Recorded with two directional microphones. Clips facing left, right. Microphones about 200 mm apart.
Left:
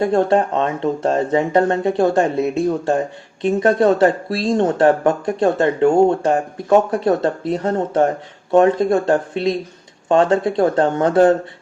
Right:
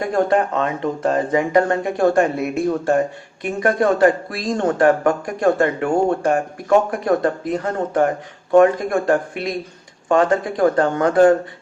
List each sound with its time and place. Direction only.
0.0 s speech: 25° left (ahead or behind)